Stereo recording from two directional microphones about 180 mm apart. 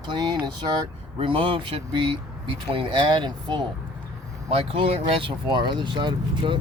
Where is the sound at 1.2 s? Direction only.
30° right (ahead or behind).